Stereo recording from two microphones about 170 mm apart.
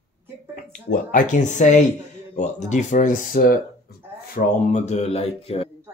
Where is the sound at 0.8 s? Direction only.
50° left (ahead or behind).